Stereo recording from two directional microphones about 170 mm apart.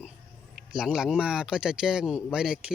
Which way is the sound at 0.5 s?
5° right (ahead or behind).